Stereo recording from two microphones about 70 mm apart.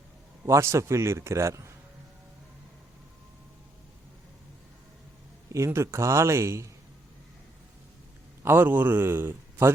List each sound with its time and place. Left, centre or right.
0.4 s a man's voice: right
5.5 s a man's voice: right
8.4 s a man's voice: right